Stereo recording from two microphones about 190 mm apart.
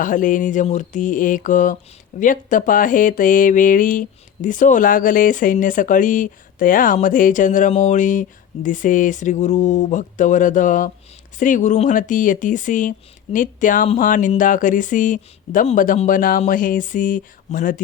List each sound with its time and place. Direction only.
0.0 s speech: 45° left (ahead or behind)